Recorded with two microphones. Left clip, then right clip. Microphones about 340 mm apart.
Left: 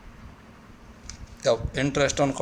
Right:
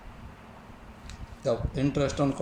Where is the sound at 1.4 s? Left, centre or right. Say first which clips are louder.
Left 5 dB; left.